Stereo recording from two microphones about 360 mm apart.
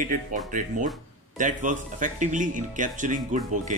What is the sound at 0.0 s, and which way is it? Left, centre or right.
Speech, right.